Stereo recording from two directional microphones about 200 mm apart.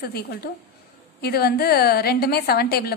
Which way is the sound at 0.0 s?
50° left (ahead or behind).